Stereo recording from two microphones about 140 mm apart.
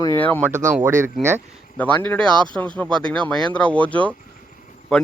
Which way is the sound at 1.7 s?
10° left (ahead or behind).